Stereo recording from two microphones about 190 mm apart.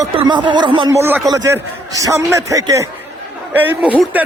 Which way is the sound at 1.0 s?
10° right (ahead or behind).